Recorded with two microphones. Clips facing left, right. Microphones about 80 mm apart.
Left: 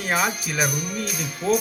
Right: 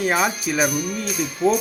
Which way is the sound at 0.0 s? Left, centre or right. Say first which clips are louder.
Right 3 dB; centre.